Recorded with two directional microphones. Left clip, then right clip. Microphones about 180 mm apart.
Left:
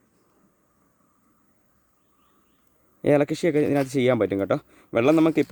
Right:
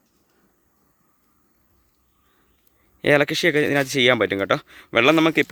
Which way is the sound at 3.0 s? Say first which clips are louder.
Right 3 dB; 10° left (ahead or behind).